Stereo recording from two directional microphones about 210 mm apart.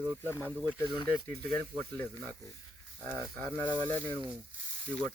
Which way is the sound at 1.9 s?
5° left (ahead or behind).